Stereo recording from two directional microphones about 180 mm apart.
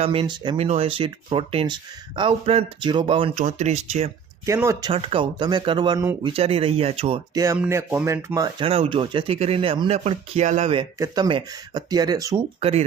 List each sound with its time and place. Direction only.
0.0 s speech: 30° right (ahead or behind)
4.4 s speech: 15° right (ahead or behind)
4.9 s speech: 30° right (ahead or behind)
7.3 s speech: 15° right (ahead or behind)
8.5 s speech: 30° right (ahead or behind)
10.9 s speech: 20° right (ahead or behind)
12.5 s speech: 35° right (ahead or behind)